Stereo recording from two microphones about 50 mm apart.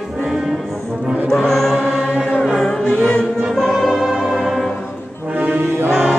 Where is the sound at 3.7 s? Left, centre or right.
Centre.